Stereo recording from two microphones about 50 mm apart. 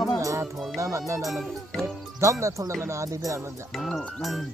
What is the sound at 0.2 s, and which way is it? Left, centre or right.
Music, right.